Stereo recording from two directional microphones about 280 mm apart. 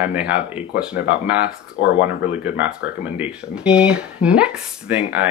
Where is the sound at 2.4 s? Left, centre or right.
Centre.